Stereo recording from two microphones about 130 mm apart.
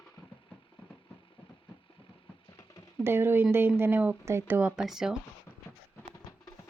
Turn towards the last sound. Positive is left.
turn(degrees=-5)  # may be behind; listen again after turning